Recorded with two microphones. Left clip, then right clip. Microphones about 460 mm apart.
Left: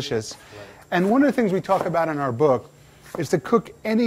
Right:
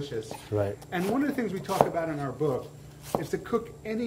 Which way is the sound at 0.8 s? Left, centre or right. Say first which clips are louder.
Left 10 dB; left.